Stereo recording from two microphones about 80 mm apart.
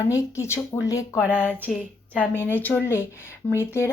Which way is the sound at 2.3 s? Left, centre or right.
Left.